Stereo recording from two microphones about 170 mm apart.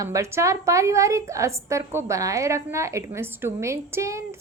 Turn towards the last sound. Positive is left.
turn(degrees=-15)  # may be behind; listen again after turning